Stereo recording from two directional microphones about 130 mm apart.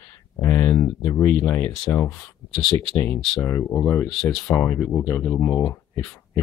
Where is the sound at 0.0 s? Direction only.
15° left (ahead or behind).